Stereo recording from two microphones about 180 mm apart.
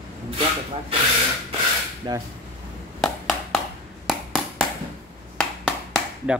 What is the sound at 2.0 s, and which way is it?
Speech, 25° right (ahead or behind).